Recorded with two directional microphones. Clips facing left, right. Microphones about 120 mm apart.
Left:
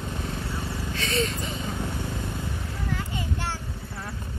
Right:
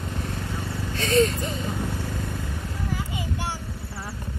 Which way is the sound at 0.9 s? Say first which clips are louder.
Right 8 dB; 40° right (ahead or behind).